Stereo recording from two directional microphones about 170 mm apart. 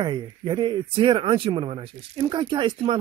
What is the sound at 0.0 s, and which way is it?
Speech, 25° right (ahead or behind).